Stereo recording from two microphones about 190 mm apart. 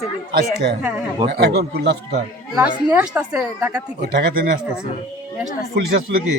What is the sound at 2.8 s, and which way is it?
Speech, 5° right (ahead or behind).